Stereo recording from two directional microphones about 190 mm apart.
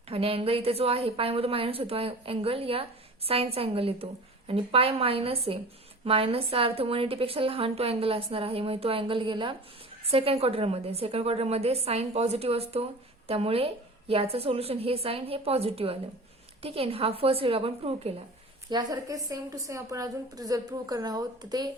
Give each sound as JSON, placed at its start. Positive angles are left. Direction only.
{"t": 0.1, "sound": "a woman's voice", "side_deg": -30}